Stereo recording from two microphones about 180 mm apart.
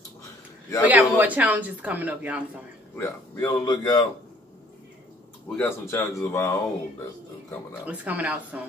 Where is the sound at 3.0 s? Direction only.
15° left (ahead or behind).